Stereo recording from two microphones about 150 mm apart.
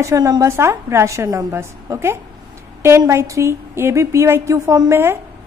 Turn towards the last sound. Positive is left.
turn(degrees=-15)  # may be behind; listen again after turning